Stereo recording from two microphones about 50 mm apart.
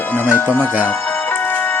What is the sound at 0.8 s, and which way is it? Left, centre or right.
Music, left.